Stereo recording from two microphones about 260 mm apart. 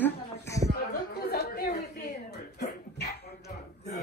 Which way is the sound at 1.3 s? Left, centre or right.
Left.